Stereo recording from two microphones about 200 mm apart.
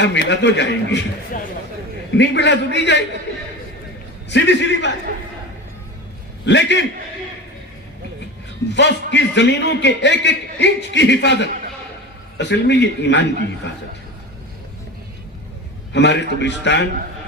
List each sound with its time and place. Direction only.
0.0 s a man's voice: 60° left (ahead or behind)
4.3 s a man's voice: 60° left (ahead or behind)
6.4 s a man's voice: 60° left (ahead or behind)
8.7 s a man's voice: 60° left (ahead or behind)
15.9 s a man's voice: 60° left (ahead or behind)